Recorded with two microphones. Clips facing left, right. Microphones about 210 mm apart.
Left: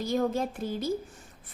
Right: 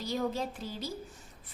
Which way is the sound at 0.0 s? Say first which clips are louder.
Left 5 dB; 50° left (ahead or behind).